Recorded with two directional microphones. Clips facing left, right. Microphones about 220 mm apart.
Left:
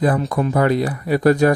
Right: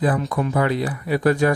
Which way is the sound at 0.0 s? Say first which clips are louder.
Left 3 dB; 40° left (ahead or behind).